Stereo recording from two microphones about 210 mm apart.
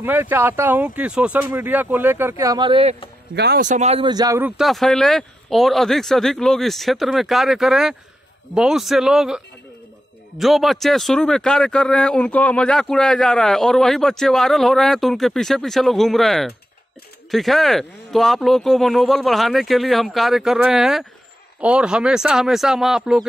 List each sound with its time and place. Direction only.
0.0 s speech: 10° right (ahead or behind); by 3.0 s 25° right (ahead or behind)
3.3 s a man's voice: 50° right (ahead or behind)
3.6 s speech: 35° right (ahead or behind); by 9.4 s centre (ahead or behind)
10.4 s speech: centre (ahead or behind)